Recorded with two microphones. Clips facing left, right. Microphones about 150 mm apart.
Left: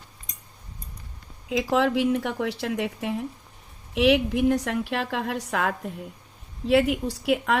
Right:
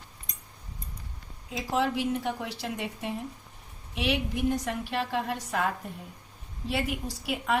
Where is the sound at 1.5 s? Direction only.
75° left (ahead or behind).